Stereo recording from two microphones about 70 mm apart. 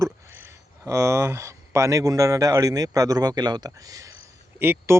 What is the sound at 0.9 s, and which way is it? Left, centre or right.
Speech, right.